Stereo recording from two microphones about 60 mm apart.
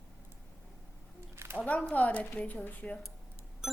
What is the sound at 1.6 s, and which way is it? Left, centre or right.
A woman's voice, left.